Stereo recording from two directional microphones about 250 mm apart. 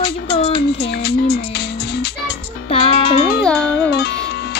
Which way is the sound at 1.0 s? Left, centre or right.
Left.